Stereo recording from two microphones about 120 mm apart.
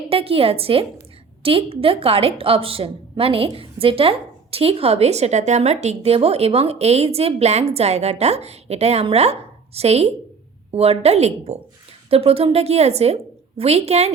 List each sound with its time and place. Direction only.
0.1 s a woman's voice: 50° right (ahead or behind)
12.1 s a woman's voice: 55° right (ahead or behind)